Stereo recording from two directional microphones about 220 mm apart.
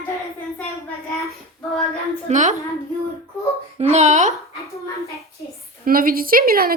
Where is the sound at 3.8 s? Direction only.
30° right (ahead or behind).